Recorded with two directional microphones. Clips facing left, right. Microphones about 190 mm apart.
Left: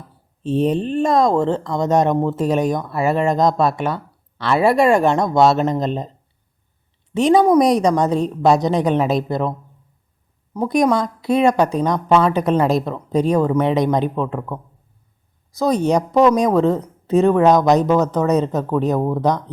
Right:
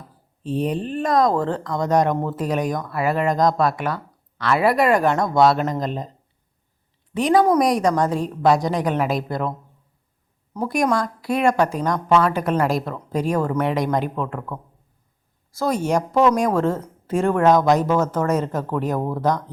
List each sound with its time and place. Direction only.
0.4 s speech: 25° left (ahead or behind)
7.1 s a woman's voice: 25° left (ahead or behind)